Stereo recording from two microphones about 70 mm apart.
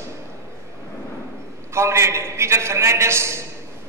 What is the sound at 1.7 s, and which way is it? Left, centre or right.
A man's voice, right.